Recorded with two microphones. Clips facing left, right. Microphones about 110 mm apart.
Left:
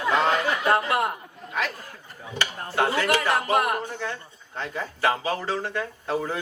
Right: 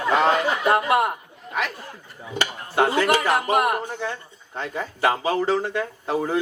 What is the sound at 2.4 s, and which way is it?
Speech, 20° right (ahead or behind).